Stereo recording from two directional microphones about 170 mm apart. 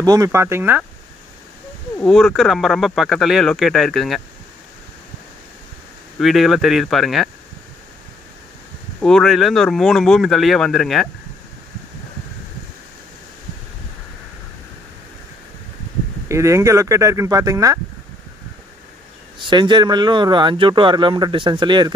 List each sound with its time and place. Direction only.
0.0 s speech: 20° right (ahead or behind)
2.0 s speech: centre (ahead or behind)
6.1 s speech: centre (ahead or behind)
9.0 s speech: centre (ahead or behind)
16.3 s speech: 15° right (ahead or behind)
19.3 s speech: 30° right (ahead or behind)